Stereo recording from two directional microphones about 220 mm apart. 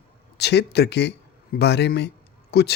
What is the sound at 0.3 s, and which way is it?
Speech, 50° left (ahead or behind).